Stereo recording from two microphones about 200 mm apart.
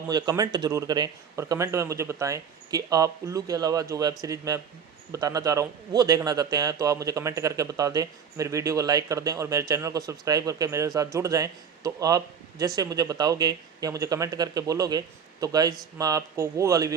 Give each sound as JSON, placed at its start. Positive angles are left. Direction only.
{"t": 0.1, "sound": "a man's voice", "side_deg": -20}